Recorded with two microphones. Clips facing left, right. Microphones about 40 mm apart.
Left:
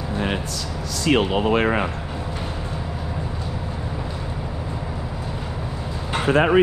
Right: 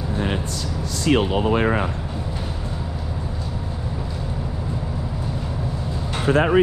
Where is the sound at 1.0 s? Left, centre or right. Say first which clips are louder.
Even; left.